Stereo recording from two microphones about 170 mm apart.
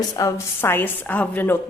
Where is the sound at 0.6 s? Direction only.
10° left (ahead or behind).